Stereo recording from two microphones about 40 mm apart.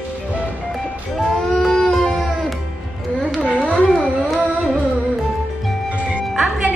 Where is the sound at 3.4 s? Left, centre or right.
Right.